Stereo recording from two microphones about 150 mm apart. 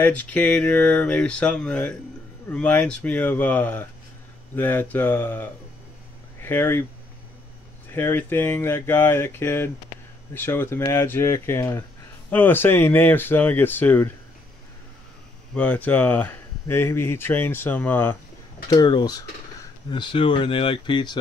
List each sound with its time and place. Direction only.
0.0 s speech: 10° left (ahead or behind)
7.9 s speech: 15° left (ahead or behind)
15.5 s speech: 10° left (ahead or behind)
18.7 s speech: 30° left (ahead or behind)